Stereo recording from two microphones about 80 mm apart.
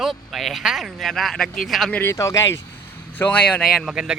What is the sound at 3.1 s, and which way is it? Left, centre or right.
Speech, centre.